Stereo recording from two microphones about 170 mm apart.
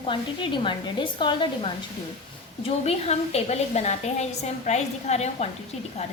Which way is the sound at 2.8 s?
40° left (ahead or behind).